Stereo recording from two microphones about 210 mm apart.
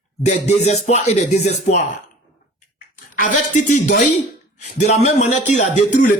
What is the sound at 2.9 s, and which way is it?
A man's voice, 40° left (ahead or behind).